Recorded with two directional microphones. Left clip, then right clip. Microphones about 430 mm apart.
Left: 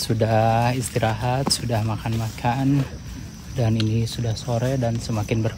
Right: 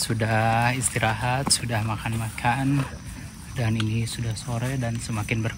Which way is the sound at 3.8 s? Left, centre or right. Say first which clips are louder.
Left 4 dB; centre.